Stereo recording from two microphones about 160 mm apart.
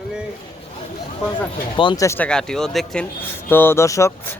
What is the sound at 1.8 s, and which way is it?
Speech, 30° left (ahead or behind).